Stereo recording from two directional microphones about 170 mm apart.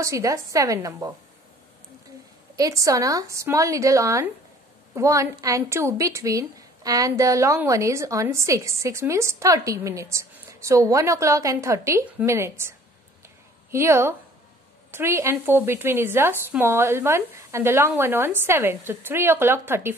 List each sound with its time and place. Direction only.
0.0 s a woman's voice: 20° right (ahead or behind)
2.5 s a woman's voice: 20° right (ahead or behind)